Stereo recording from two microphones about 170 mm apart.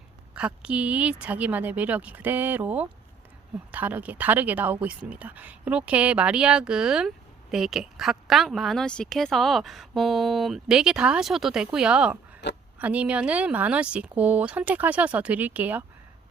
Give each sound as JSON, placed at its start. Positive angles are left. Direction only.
{"t": 0.3, "sound": "a woman's voice", "side_deg": -5}
{"t": 12.4, "sound": "a sound", "side_deg": 90}
{"t": 12.8, "sound": "a woman's voice", "side_deg": -10}